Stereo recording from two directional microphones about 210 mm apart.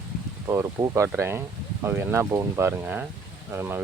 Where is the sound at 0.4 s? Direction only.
15° right (ahead or behind).